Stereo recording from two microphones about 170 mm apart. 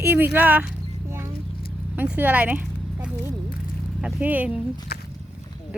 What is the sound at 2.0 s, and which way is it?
Speech, 10° right (ahead or behind).